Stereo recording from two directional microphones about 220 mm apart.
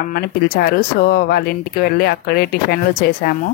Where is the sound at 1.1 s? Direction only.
45° left (ahead or behind).